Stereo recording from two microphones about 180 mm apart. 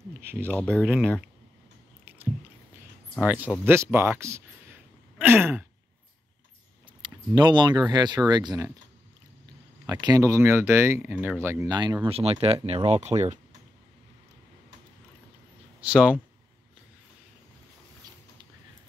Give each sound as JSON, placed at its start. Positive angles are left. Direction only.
{"t": 0.2, "sound": "speech", "side_deg": -15}
{"t": 0.5, "sound": "speech", "side_deg": 10}
{"t": 3.2, "sound": "speech", "side_deg": -10}
{"t": 7.0, "sound": "a sound", "side_deg": -25}
{"t": 7.3, "sound": "speech", "side_deg": -25}
{"t": 9.8, "sound": "speech", "side_deg": -20}
{"t": 15.8, "sound": "speech", "side_deg": -5}